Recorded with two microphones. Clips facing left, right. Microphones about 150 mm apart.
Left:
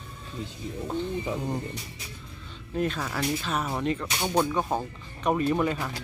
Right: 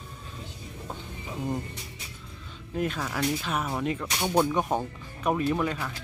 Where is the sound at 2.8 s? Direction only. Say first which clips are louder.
Left 1 dB; 5° right (ahead or behind).